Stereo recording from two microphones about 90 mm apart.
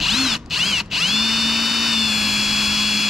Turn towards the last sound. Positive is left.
turn(degrees=-5)  # may be behind; listen again after turning